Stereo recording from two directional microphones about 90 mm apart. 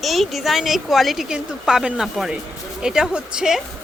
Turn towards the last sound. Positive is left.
turn(degrees=-10)  # may be behind; listen again after turning